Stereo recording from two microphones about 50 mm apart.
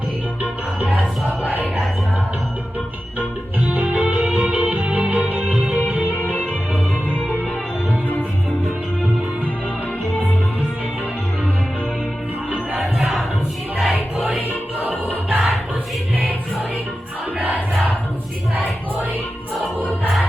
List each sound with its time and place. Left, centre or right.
0.4 s music: right
3.7 s music: right
12.7 s crowd: centre
13.7 s music: centre
14.8 s music: right
17.3 s crowd: right